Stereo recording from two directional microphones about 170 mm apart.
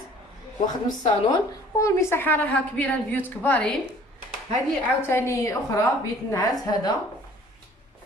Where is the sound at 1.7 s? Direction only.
20° left (ahead or behind).